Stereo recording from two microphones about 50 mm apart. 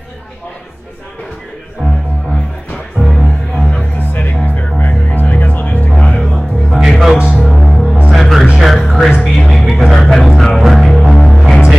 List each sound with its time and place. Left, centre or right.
3.1 s music: centre
4.0 s music: left
6.3 s music: centre
7.5 s music: centre
9.8 s music: centre